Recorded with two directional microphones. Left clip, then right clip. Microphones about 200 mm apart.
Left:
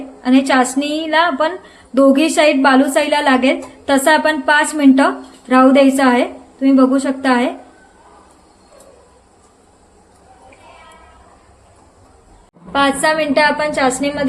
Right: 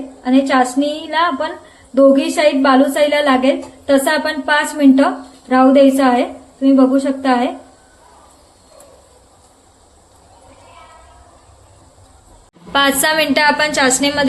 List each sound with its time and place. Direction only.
0.2 s a woman's voice: 25° left (ahead or behind)
12.7 s a woman's voice: centre (ahead or behind)